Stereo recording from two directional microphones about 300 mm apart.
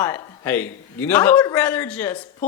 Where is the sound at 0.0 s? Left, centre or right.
Centre.